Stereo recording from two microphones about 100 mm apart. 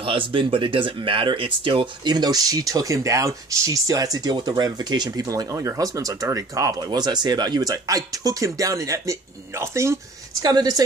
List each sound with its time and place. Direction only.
0.0 s speech: 60° right (ahead or behind); by 9.9 s 30° right (ahead or behind)
10.4 s speech: 40° right (ahead or behind)